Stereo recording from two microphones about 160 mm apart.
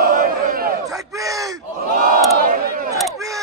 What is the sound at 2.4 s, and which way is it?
Speech, 60° right (ahead or behind).